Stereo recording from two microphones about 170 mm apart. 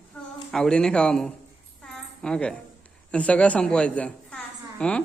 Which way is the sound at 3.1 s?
5° left (ahead or behind).